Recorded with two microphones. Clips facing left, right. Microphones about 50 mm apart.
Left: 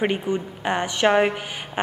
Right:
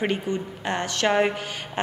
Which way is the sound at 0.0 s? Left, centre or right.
Centre.